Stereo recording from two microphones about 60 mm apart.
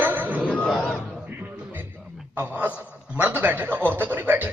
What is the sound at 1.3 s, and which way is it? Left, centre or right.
Music, right.